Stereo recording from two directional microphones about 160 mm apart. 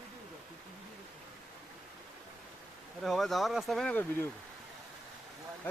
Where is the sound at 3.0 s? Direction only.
Centre (ahead or behind).